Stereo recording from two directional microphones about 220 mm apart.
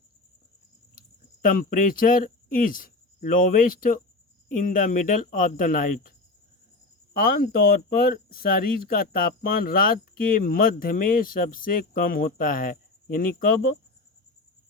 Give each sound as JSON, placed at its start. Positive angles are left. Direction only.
{"t": 1.4, "sound": "speech", "side_deg": 40}
{"t": 7.1, "sound": "speech", "side_deg": 40}